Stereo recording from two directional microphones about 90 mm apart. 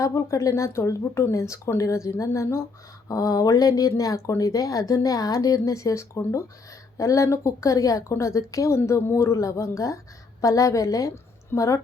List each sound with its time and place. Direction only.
0.0 s a woman's voice: 35° left (ahead or behind)